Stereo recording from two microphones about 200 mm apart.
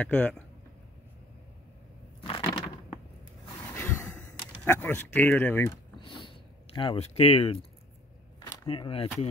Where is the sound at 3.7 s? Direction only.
10° left (ahead or behind).